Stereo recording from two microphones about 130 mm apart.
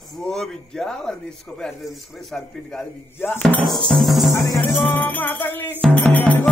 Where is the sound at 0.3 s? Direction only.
5° left (ahead or behind).